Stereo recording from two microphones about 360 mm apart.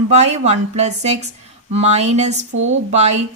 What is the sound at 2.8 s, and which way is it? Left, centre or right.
Speech, centre.